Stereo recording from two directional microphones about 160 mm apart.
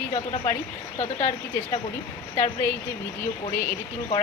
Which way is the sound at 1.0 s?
20° left (ahead or behind).